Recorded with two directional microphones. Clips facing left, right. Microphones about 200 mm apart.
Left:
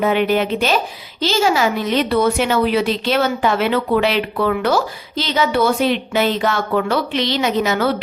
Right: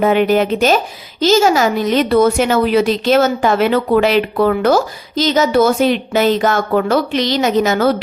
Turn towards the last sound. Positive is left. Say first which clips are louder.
# right 4 dB
turn(degrees=-45)  # may be behind; listen again after turning